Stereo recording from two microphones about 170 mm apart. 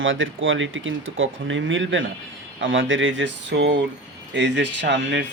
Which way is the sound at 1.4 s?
90° right.